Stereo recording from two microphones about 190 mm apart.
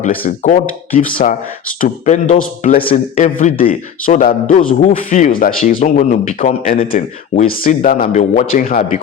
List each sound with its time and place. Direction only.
0.0 s speech: 45° left (ahead or behind)